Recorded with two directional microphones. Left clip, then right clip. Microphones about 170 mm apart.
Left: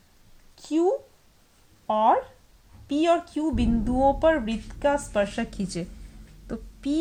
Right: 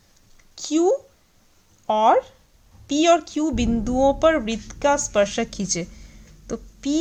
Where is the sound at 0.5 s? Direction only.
45° right (ahead or behind).